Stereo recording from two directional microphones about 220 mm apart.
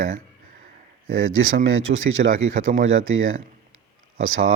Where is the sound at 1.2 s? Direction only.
65° right (ahead or behind).